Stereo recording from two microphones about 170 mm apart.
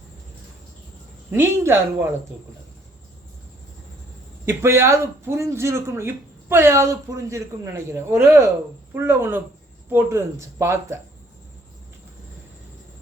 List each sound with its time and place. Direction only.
1.3 s speech: 15° right (ahead or behind)
4.4 s speech: 15° right (ahead or behind)